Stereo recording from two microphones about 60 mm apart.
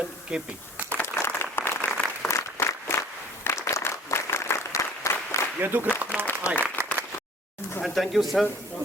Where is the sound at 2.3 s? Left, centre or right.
Left.